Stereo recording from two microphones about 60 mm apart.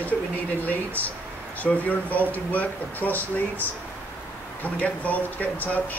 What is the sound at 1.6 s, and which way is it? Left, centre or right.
Speech, left.